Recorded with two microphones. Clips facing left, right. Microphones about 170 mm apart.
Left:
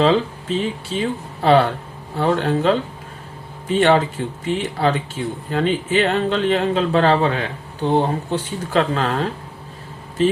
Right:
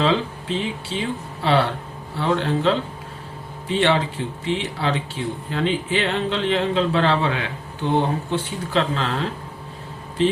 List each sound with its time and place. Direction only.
0.0 s speech: 40° left (ahead or behind)
8.7 s speech: 45° left (ahead or behind)